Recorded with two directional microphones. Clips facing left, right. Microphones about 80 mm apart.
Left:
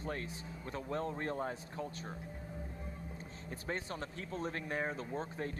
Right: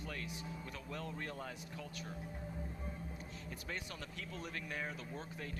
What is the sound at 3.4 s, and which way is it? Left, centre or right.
Speech, left.